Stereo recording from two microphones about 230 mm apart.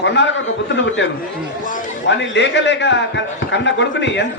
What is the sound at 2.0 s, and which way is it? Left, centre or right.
Speech, left.